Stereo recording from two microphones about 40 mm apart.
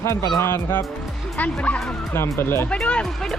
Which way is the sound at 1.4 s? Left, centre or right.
Left.